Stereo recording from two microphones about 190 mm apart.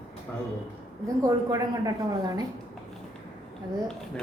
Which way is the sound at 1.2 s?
20° right (ahead or behind).